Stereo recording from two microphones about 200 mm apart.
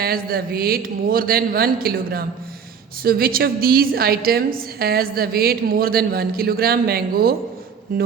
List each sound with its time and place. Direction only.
0.0 s a woman's voice: 50° right (ahead or behind)